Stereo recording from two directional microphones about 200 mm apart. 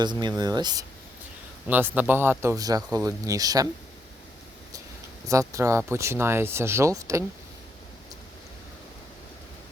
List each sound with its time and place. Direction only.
0.0 s speech: 20° right (ahead or behind)
1.6 s speech: 10° right (ahead or behind)
5.3 s speech: 15° right (ahead or behind)